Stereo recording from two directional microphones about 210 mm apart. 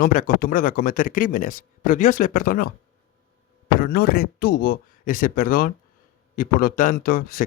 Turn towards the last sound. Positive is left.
turn(degrees=40)  # may be behind; listen again after turning